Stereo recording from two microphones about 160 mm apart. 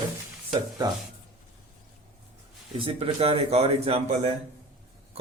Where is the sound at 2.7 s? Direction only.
35° right (ahead or behind).